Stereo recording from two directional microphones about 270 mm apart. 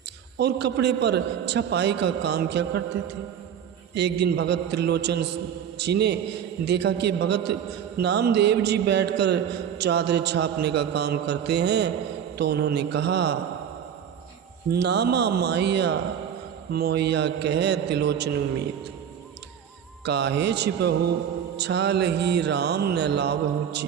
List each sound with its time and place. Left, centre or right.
0.3 s a man's voice: right
3.9 s a man's voice: right
14.7 s a man's voice: right
20.1 s a man's voice: right